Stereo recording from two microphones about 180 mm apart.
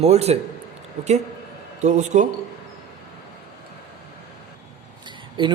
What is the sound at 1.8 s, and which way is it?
Speech, 40° right (ahead or behind).